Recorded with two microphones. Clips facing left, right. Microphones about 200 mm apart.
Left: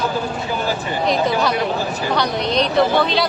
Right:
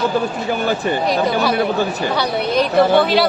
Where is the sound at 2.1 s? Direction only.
5° right (ahead or behind).